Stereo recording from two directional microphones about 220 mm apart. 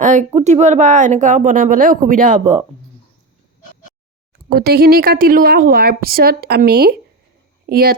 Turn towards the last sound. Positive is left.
turn(degrees=-40)  # may be behind; listen again after turning